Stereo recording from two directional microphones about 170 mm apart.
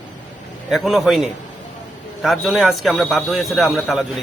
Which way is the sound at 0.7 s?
Centre (ahead or behind).